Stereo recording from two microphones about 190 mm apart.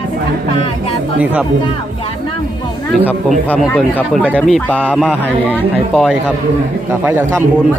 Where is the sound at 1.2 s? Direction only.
5° right (ahead or behind).